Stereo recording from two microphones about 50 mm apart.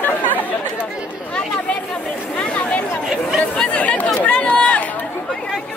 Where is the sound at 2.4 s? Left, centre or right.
Left.